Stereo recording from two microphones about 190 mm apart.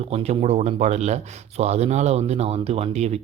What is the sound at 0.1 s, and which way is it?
Speech, 35° right (ahead or behind).